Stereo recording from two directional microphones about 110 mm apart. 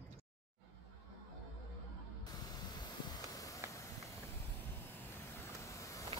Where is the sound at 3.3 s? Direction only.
30° left (ahead or behind).